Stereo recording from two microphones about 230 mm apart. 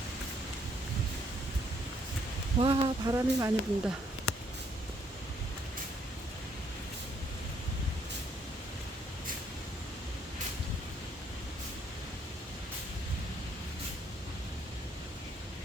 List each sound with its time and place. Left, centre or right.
2.6 s speech: right